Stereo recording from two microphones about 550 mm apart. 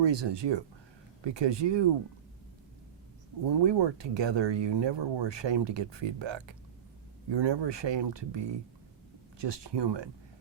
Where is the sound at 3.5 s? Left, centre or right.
Right.